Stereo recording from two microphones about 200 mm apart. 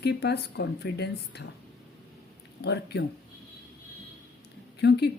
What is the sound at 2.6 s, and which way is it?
Speech, 55° left (ahead or behind).